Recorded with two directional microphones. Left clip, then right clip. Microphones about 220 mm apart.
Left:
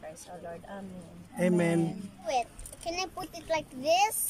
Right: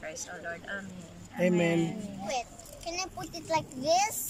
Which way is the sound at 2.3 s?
15° left (ahead or behind).